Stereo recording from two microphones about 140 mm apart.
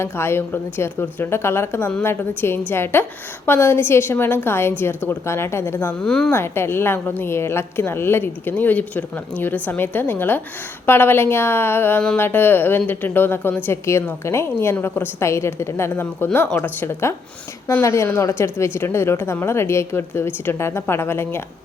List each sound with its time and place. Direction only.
0.0 s speech: 15° left (ahead or behind)
6.0 s a woman's voice: 5° left (ahead or behind)
6.3 s speech: 15° left (ahead or behind)